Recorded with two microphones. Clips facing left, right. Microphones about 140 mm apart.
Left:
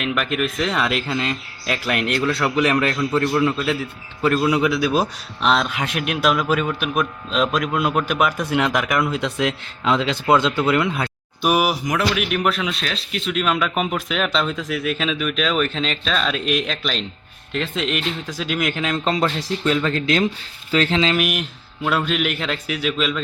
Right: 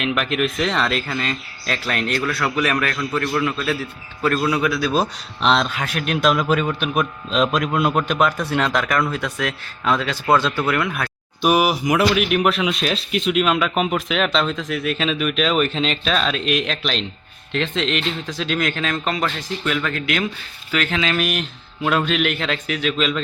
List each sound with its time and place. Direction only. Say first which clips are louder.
0.0 s a man's voice: right 1 dB; centre (ahead or behind)
5.7 s speech: left 1 dB; 20° left (ahead or behind)
6.1 s a man's voice: right 2 dB; 10° left (ahead or behind)
11.4 s a man's voice: right 2 dB; centre (ahead or behind)
19.0 s speech: left 3 dB; 30° left (ahead or behind)
21.2 s a man's voice: even; 10° left (ahead or behind)